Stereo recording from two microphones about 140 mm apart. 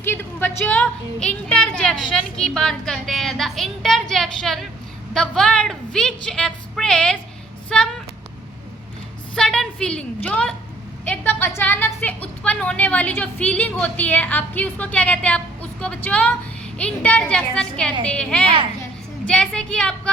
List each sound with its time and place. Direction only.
0.0 s a woman's voice: 15° left (ahead or behind)
9.3 s a woman's voice: 5° left (ahead or behind)